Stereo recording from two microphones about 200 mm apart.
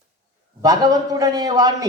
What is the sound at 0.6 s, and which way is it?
A man's voice, 20° right (ahead or behind).